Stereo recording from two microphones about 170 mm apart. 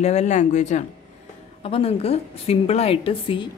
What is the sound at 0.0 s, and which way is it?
A woman's voice, 40° left (ahead or behind).